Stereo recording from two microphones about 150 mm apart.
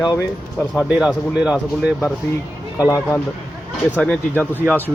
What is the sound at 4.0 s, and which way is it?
Speech, 10° left (ahead or behind).